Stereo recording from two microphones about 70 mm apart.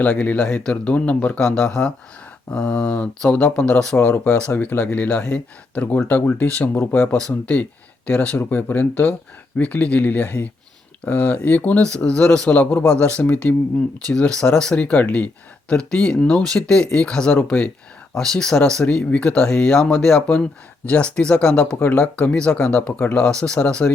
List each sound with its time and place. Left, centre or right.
0.0 s speech: left
0.4 s speech: centre
0.7 s speech: centre
3.9 s speech: left
8.4 s speech: left
14.1 s speech: centre
15.7 s speech: centre